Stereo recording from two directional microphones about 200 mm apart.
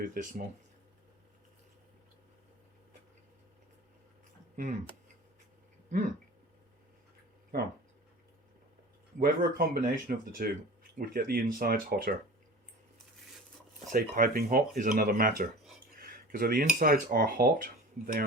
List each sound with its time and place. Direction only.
0.0 s speech: 40° right (ahead or behind)
7.5 s speech: 50° right (ahead or behind)
9.1 s speech: 45° right (ahead or behind)
13.9 s speech: 45° right (ahead or behind)